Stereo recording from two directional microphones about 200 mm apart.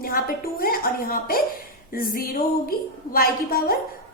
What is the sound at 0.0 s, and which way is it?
A woman's voice, 45° left (ahead or behind).